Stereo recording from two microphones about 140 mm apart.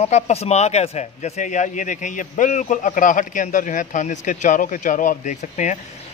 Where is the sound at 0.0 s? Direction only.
50° left (ahead or behind).